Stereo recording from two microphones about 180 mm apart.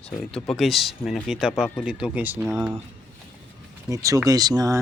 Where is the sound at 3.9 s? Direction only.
20° right (ahead or behind).